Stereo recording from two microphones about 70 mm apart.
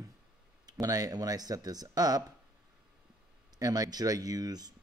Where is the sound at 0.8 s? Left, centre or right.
Right.